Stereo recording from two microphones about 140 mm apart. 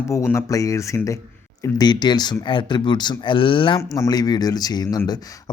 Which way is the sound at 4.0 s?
25° left (ahead or behind).